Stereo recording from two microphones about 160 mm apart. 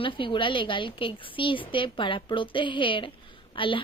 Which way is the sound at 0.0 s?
30° left (ahead or behind).